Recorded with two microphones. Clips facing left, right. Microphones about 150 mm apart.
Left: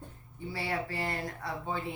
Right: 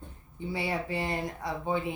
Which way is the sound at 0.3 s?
20° right (ahead or behind).